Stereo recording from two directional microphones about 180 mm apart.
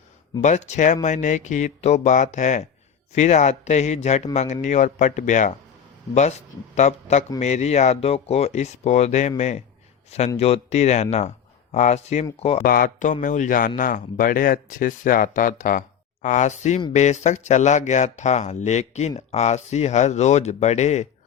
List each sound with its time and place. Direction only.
0.4 s speech: 40° left (ahead or behind)
12.6 s speech: 55° left (ahead or behind)